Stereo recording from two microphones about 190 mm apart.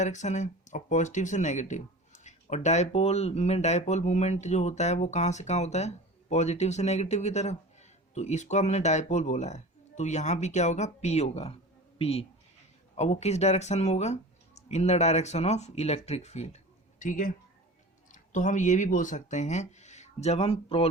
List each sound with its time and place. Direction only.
0.0 s speech: 40° left (ahead or behind)